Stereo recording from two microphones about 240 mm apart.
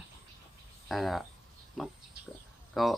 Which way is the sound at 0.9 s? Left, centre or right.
Centre.